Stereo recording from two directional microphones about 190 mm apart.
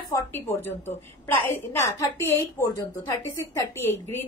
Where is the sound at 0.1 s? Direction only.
10° left (ahead or behind).